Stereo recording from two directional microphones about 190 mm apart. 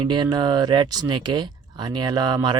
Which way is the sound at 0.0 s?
25° right (ahead or behind).